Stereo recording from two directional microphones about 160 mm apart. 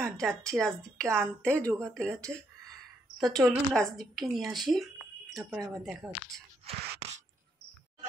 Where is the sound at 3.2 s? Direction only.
Centre (ahead or behind).